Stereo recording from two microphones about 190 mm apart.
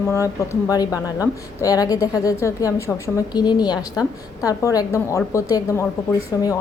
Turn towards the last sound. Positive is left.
turn(degrees=20)  # may be behind; listen again after turning